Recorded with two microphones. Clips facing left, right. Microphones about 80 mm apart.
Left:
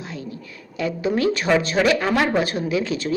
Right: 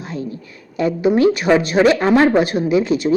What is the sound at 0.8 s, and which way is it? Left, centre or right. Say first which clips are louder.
A woman's voice: right 7 dB; right.